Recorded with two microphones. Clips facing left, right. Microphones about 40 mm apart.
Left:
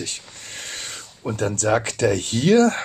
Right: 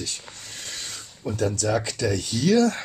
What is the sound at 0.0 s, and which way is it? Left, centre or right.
Speech, left.